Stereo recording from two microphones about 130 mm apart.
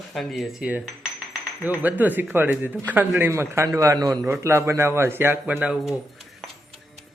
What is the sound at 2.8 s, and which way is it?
A man's voice, 10° right (ahead or behind).